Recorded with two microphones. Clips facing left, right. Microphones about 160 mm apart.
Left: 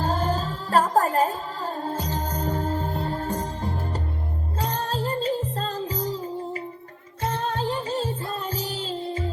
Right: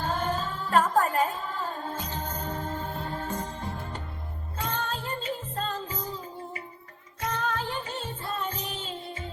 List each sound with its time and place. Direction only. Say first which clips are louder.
0.0 s music: left 4 dB; 35° left (ahead or behind)